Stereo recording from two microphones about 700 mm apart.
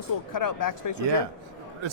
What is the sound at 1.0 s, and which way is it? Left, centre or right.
Speech, right.